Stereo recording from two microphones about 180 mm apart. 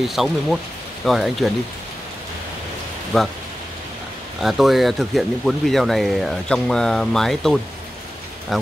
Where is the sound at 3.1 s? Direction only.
Centre (ahead or behind).